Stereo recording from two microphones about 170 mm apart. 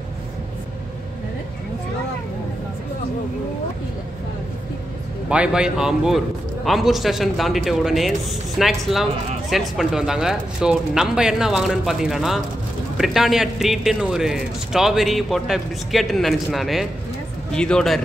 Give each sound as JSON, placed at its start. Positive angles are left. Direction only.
{"t": 5.3, "sound": "a man's voice", "side_deg": -5}